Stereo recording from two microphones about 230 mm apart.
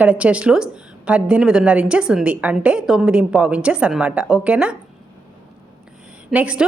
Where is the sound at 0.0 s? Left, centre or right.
Centre.